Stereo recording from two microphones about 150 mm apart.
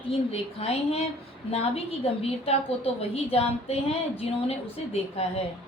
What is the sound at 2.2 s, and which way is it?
A woman's voice, 40° left (ahead or behind).